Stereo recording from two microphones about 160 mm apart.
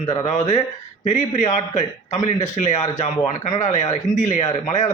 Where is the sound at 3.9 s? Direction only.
45° left (ahead or behind).